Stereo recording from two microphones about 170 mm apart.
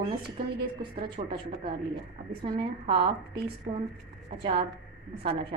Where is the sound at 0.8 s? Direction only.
30° right (ahead or behind).